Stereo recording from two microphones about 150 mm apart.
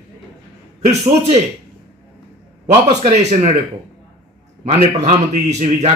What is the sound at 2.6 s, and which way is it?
Speech, 45° right (ahead or behind).